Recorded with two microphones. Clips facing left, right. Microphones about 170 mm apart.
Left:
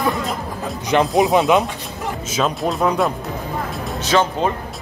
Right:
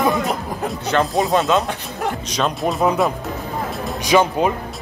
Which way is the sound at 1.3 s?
20° left (ahead or behind).